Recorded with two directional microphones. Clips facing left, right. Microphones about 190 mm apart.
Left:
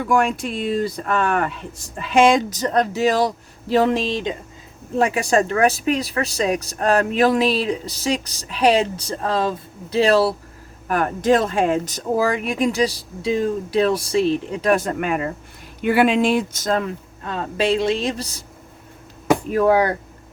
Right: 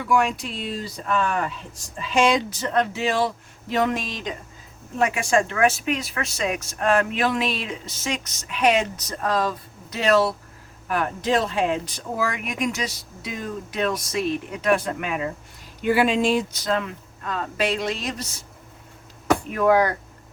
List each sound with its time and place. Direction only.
0.0 s a woman's voice: 50° left (ahead or behind); by 10.3 s 30° left (ahead or behind)
10.8 s a woman's voice: 45° left (ahead or behind)
15.8 s speech: 60° left (ahead or behind); by 16.9 s 40° left (ahead or behind)
17.2 s speech: 30° left (ahead or behind)
19.5 s a woman's voice: 30° left (ahead or behind)